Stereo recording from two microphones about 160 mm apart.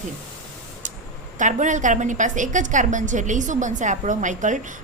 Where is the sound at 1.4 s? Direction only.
50° right (ahead or behind).